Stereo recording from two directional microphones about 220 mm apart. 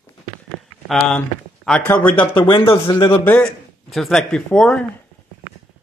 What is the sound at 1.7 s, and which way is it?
Speech, 5° left (ahead or behind).